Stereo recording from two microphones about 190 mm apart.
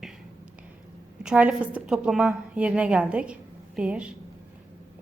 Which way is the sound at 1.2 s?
5° right (ahead or behind).